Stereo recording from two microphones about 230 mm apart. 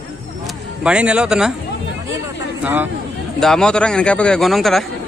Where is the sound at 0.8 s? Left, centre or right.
Centre.